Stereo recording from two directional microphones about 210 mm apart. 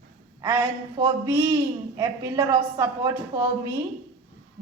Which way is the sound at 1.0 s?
15° right (ahead or behind).